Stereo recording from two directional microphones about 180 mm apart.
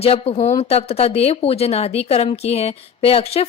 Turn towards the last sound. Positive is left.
turn(degrees=35)  # may be behind; listen again after turning